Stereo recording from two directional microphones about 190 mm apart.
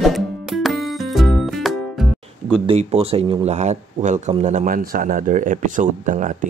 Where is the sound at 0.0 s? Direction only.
Centre (ahead or behind).